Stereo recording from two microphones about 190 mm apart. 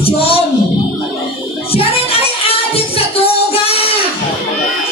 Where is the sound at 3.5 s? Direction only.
30° left (ahead or behind).